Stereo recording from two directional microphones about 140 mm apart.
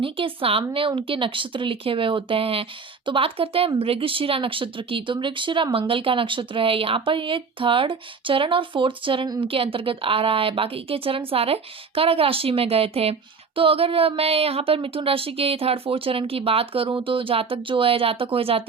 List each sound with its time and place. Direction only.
0.0 s a woman's voice: 40° right (ahead or behind)